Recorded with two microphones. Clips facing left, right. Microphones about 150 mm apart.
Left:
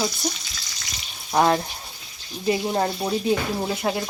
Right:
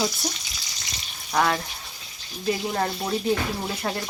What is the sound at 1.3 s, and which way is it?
Speech, 25° left (ahead or behind).